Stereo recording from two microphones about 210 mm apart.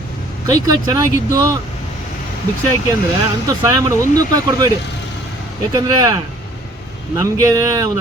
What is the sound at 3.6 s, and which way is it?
Speech, 15° right (ahead or behind).